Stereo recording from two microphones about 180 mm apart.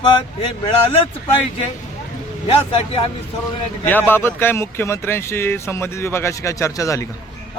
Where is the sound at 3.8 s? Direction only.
10° left (ahead or behind).